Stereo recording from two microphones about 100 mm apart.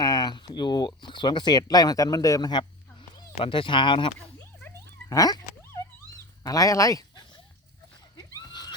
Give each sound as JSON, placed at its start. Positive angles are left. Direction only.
{"t": 0.0, "sound": "speech", "side_deg": 45}
{"t": 2.4, "sound": "a sound", "side_deg": 50}
{"t": 3.3, "sound": "speech", "side_deg": 60}
{"t": 5.0, "sound": "cat", "side_deg": 40}
{"t": 6.1, "sound": "speech", "side_deg": 35}
{"t": 8.1, "sound": "neigh", "side_deg": 45}